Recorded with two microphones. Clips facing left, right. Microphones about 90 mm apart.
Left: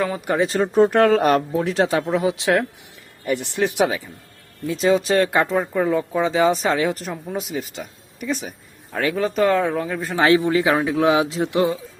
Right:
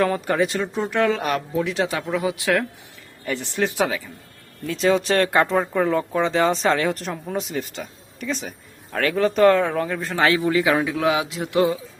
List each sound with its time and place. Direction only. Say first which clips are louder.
0.4 s speech: left 8 dB; 40° left (ahead or behind); by 4.1 s 20° left (ahead or behind)
4.6 s speech: left 1 dB; 5° left (ahead or behind)
10.2 s speech: left 3 dB; 20° left (ahead or behind)